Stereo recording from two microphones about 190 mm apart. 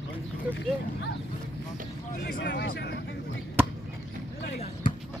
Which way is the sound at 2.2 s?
60° left (ahead or behind).